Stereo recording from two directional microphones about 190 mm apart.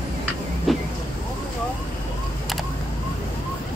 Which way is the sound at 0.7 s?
Centre (ahead or behind).